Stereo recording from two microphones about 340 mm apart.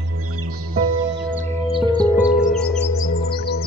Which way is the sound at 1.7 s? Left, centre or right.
Centre.